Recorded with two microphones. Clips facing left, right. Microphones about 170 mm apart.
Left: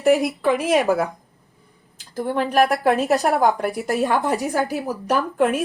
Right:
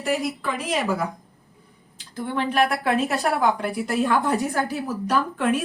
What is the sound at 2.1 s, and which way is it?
Speech, 40° left (ahead or behind).